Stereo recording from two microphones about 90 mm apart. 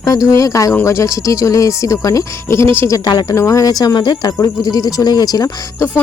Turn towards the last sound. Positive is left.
turn(degrees=45)  # may be behind; listen again after turning